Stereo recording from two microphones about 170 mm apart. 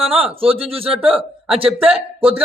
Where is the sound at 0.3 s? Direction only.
35° right (ahead or behind).